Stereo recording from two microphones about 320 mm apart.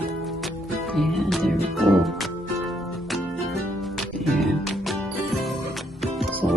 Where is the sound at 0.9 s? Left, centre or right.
Centre.